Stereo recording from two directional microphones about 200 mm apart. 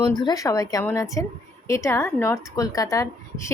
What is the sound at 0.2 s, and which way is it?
Speech, 20° left (ahead or behind).